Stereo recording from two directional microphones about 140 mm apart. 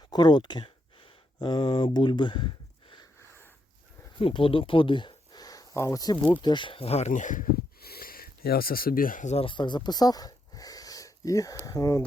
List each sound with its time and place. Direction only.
0.1 s speech: 30° left (ahead or behind)
4.2 s speech: 40° left (ahead or behind); by 9.3 s 75° left (ahead or behind)
9.3 s speech: 40° left (ahead or behind); by 12.0 s 25° left (ahead or behind)